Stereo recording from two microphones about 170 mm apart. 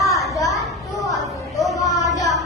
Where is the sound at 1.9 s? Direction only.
20° left (ahead or behind).